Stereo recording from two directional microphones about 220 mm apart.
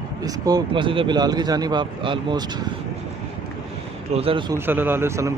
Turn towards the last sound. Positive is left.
turn(degrees=-15)  # may be behind; listen again after turning